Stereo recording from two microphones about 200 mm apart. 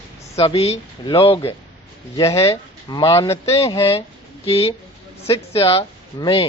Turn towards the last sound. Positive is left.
turn(degrees=30)  # may be behind; listen again after turning